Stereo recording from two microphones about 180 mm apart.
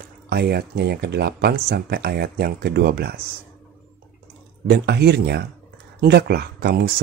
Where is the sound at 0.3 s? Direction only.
60° right (ahead or behind).